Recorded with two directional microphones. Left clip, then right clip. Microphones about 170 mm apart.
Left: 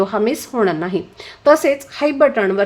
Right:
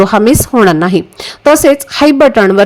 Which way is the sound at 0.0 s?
50° right (ahead or behind).